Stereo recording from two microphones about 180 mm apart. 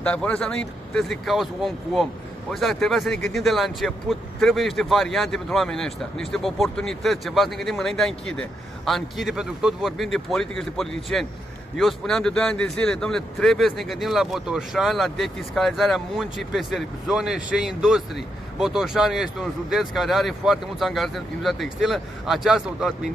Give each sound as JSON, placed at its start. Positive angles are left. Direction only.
{"t": 0.0, "sound": "speech", "side_deg": 5}